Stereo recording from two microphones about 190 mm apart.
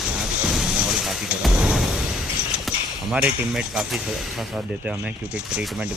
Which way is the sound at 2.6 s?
5° right (ahead or behind).